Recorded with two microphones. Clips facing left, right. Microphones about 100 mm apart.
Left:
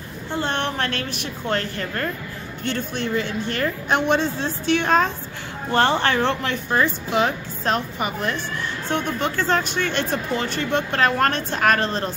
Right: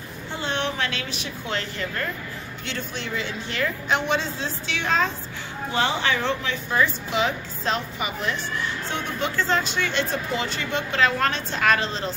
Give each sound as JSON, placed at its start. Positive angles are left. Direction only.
{"t": 0.4, "sound": "a woman's voice", "side_deg": 55}